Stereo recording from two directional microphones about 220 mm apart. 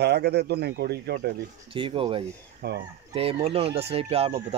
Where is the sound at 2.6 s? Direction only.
45° right (ahead or behind).